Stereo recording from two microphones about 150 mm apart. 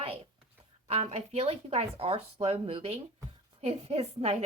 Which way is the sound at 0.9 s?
45° right (ahead or behind).